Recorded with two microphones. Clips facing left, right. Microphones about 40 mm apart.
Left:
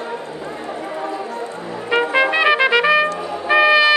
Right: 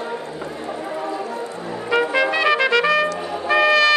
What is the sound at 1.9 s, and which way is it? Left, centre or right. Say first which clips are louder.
Music: left 2 dB; left.